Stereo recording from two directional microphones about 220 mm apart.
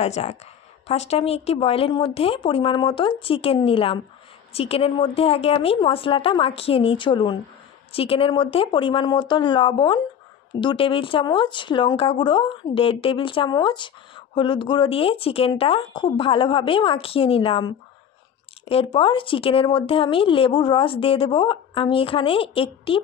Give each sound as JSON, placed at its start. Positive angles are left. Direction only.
{"t": 0.0, "sound": "speech", "side_deg": 30}